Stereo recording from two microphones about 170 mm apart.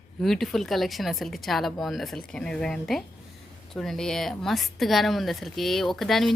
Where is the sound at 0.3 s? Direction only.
Centre (ahead or behind).